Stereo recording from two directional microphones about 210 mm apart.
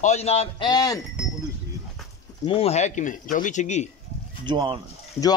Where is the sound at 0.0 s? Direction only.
30° left (ahead or behind).